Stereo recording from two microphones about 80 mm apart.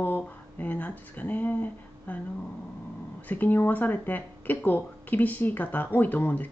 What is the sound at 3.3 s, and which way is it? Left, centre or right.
Speech, left.